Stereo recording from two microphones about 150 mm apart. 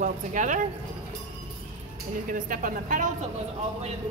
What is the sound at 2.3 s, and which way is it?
Speech, 65° right (ahead or behind).